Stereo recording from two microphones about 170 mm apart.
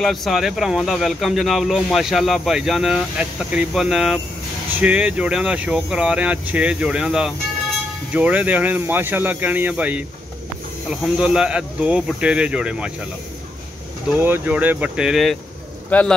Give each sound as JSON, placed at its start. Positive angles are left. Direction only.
{"t": 0.0, "sound": "speech", "side_deg": 0}
{"t": 14.1, "sound": "a man's voice", "side_deg": -10}